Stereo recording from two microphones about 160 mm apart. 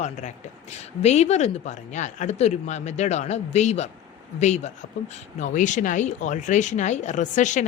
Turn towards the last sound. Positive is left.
turn(degrees=50)  # may be behind; listen again after turning